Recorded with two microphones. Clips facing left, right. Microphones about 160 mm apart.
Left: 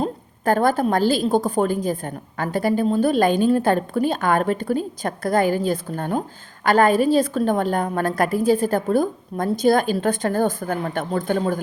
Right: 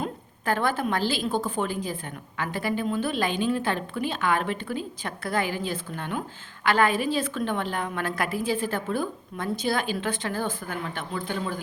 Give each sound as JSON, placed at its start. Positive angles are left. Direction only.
{"t": 0.0, "sound": "a woman's voice", "side_deg": 40}